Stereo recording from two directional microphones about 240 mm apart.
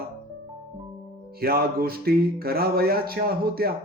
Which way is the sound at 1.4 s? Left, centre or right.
Right.